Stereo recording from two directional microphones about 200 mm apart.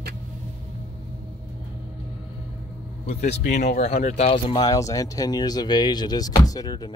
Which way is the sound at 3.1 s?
35° left (ahead or behind).